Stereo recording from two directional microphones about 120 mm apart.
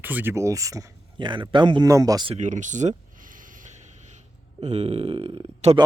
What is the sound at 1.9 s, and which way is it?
Speech, 30° right (ahead or behind).